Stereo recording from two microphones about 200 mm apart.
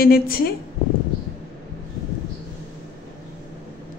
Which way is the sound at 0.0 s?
50° left (ahead or behind).